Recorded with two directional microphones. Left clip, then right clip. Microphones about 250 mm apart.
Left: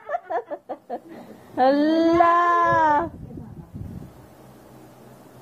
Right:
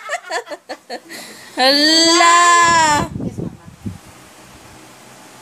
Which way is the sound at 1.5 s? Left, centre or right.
Right.